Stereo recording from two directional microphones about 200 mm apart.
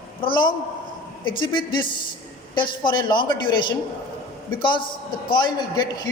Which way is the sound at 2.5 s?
25° left (ahead or behind).